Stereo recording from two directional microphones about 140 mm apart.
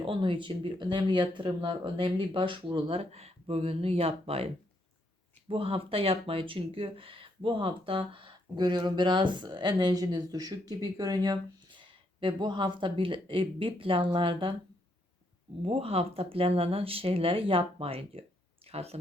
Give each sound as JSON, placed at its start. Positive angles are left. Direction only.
{"t": 0.0, "sound": "speech", "side_deg": -35}
{"t": 5.5, "sound": "speech", "side_deg": -40}
{"t": 15.6, "sound": "speech", "side_deg": -45}